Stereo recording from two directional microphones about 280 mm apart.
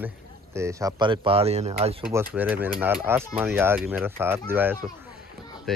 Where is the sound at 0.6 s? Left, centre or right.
Centre.